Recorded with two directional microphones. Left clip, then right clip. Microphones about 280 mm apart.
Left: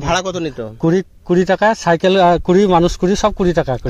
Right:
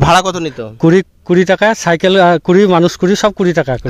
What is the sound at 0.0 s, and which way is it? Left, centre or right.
A man's voice, right.